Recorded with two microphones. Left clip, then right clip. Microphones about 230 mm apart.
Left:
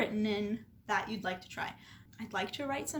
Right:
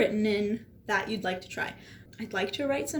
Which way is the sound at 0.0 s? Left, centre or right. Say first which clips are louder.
Right 7 dB; centre.